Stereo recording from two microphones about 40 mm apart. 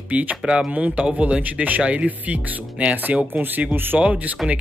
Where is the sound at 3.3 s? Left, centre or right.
Right.